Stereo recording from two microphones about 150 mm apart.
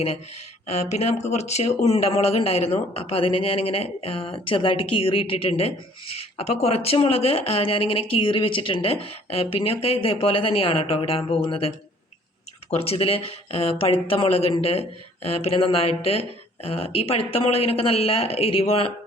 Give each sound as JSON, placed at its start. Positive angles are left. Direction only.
{"t": 0.7, "sound": "speech", "side_deg": 45}
{"t": 12.7, "sound": "speech", "side_deg": 40}